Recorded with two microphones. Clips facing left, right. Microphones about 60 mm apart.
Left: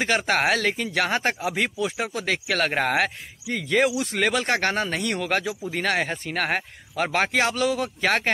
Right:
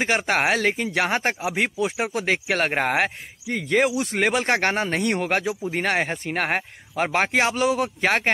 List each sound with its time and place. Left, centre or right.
0.0 s speech: centre
1.2 s speech: centre
2.0 s speech: right
5.7 s speech: right